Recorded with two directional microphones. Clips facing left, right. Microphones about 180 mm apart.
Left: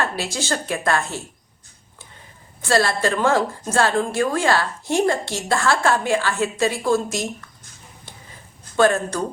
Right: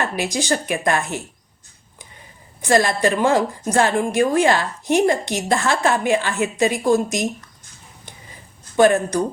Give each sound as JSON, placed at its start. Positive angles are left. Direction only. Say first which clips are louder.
{"t": 0.0, "sound": "a woman's voice", "louder": "right 2 dB", "side_deg": -15}
{"t": 2.6, "sound": "a woman's voice", "louder": "right 2 dB", "side_deg": -15}
{"t": 8.7, "sound": "a woman's voice", "louder": "right 3 dB", "side_deg": -15}